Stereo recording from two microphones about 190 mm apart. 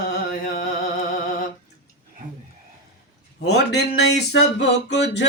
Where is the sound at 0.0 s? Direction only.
50° left (ahead or behind).